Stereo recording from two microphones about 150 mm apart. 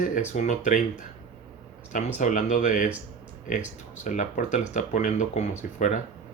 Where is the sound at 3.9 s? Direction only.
55° left (ahead or behind).